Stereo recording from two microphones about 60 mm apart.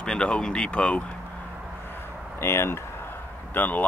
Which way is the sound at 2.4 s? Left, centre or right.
Left.